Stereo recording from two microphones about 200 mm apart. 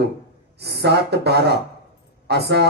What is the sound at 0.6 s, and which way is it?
Speech, 55° right (ahead or behind).